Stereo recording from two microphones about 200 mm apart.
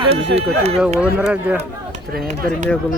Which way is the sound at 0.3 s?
30° right (ahead or behind).